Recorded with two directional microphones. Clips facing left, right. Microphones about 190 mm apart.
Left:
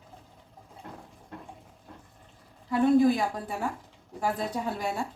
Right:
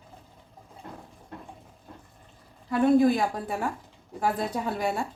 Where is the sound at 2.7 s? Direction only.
60° right (ahead or behind).